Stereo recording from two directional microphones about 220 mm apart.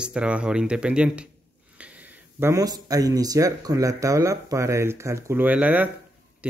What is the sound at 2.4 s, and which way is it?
Speech, 15° right (ahead or behind).